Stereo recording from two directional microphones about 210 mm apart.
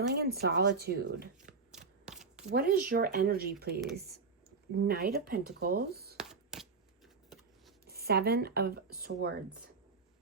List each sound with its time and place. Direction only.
0.1 s speech: 50° right (ahead or behind)
1.7 s typewriter: centre (ahead or behind)
2.5 s speech: 45° right (ahead or behind)
6.1 s a sound: centre (ahead or behind)
7.9 s speech: 50° right (ahead or behind)